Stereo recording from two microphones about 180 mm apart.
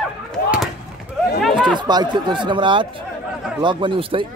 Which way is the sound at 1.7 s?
25° right (ahead or behind).